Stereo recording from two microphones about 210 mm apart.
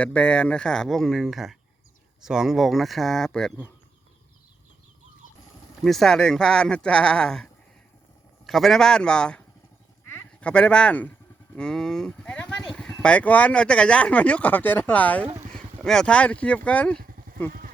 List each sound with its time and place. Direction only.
0.0 s speech: 5° left (ahead or behind)
5.8 s speech: centre (ahead or behind)
17.0 s a sound: 45° right (ahead or behind)